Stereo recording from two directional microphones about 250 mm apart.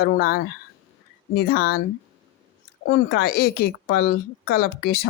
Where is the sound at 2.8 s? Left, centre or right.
Left.